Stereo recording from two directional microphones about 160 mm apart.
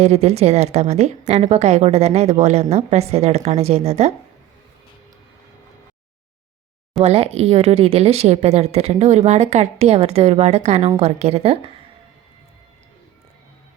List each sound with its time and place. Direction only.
0.0 s a woman's voice: 40° right (ahead or behind)
7.0 s speech: 40° right (ahead or behind)